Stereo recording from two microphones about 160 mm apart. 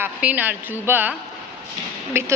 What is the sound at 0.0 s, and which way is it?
A woman's voice, 10° right (ahead or behind).